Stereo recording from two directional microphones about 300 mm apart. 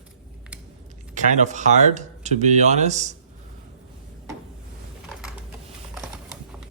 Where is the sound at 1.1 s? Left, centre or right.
Right.